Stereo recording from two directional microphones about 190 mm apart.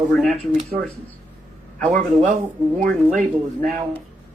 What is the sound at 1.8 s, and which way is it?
A man's voice, 40° right (ahead or behind).